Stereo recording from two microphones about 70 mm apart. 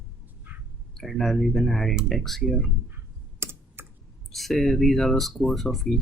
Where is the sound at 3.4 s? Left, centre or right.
Right.